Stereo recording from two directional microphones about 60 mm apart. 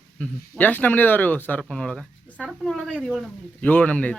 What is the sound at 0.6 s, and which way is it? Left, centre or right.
Speech, left.